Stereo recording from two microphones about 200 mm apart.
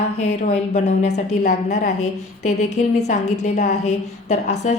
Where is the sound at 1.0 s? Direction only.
35° left (ahead or behind).